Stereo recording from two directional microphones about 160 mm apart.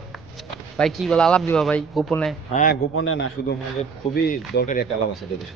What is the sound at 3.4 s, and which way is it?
Speech, 80° left.